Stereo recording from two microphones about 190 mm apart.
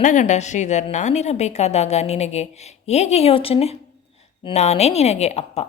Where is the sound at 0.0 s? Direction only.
40° left (ahead or behind).